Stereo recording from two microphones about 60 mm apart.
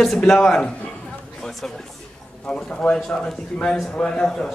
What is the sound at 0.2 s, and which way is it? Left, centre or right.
Speech, centre.